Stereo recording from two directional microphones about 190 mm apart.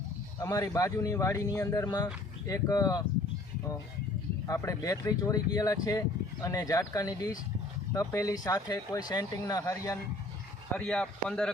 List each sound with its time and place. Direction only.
0.4 s speech: 15° left (ahead or behind)
4.4 s speech: 15° left (ahead or behind)
10.8 s speech: 5° left (ahead or behind)